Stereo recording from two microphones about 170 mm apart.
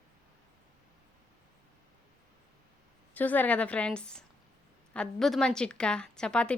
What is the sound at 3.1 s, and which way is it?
A woman's voice, 10° left (ahead or behind).